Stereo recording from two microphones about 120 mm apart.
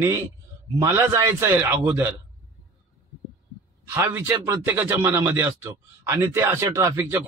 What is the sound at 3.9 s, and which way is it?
A man's voice, 20° right (ahead or behind).